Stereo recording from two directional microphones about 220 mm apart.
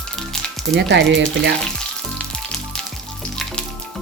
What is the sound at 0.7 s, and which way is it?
Speech, 55° right (ahead or behind).